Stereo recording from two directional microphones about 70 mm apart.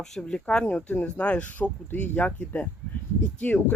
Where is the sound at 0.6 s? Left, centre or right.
Left.